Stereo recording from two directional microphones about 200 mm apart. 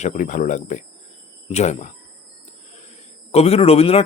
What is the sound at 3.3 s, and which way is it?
Speech, 30° left (ahead or behind).